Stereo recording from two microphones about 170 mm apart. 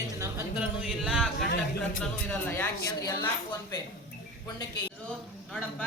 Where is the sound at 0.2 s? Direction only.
10° right (ahead or behind).